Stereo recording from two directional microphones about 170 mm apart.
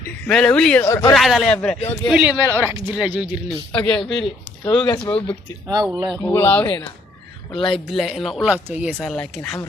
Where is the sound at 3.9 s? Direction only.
30° left (ahead or behind).